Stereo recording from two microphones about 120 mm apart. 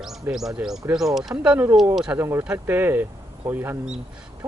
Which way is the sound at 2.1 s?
20° right (ahead or behind).